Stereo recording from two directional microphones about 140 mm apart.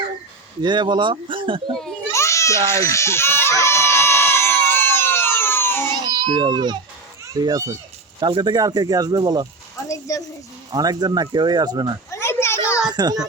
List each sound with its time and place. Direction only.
0.6 s speech: 35° right (ahead or behind)
2.1 s baby cry: 20° left (ahead or behind)
5.9 s baby cry: 30° right (ahead or behind)
7.3 s speech: 25° right (ahead or behind)
10.1 s speech: 20° left (ahead or behind)
10.7 s speech: 30° right (ahead or behind)
12.1 s a sound: 20° left (ahead or behind)
12.9 s a child's voice: 30° right (ahead or behind)